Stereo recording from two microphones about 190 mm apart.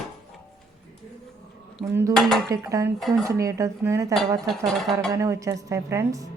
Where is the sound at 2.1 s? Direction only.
Centre (ahead or behind).